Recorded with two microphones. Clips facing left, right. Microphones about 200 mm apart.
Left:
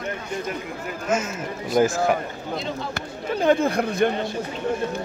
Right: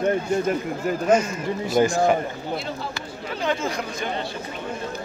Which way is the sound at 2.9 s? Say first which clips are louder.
Left 4 dB; 50° left (ahead or behind).